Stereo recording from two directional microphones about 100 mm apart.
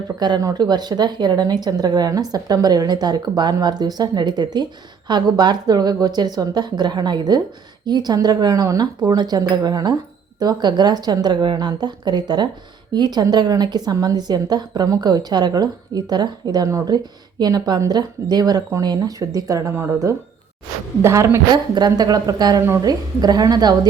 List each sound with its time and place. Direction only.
0.2 s a woman's voice: 40° right (ahead or behind)
16.6 s speech: 30° right (ahead or behind)
21.5 s speech: 40° right (ahead or behind)